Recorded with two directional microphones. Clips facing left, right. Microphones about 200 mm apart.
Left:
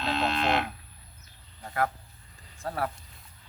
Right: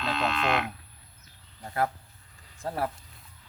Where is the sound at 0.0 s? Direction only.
35° left (ahead or behind).